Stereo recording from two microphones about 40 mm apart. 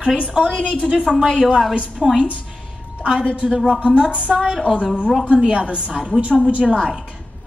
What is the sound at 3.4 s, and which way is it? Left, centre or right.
Speech, centre.